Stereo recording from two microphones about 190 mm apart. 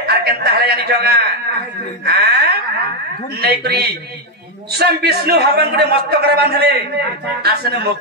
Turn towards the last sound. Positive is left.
turn(degrees=-55)  # may be behind; listen again after turning